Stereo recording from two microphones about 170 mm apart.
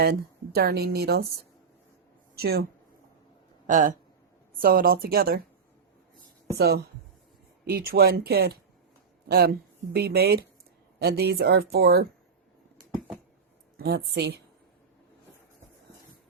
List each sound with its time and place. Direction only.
0.0 s speech: 65° right (ahead or behind)
2.3 s speech: 70° right (ahead or behind)
3.7 s speech: 50° right (ahead or behind)
4.6 s speech: 60° right (ahead or behind)
6.6 s speech: 70° right (ahead or behind)
13.7 s speech: 70° right (ahead or behind)